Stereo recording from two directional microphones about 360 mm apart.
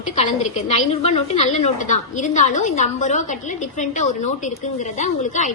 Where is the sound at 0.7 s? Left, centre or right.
Centre.